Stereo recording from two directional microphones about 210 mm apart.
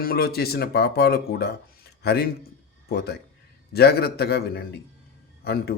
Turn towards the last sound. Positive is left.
turn(degrees=50)  # may be behind; listen again after turning